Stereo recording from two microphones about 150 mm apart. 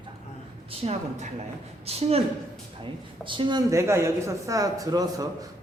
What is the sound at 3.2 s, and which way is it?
Speech, 35° right (ahead or behind).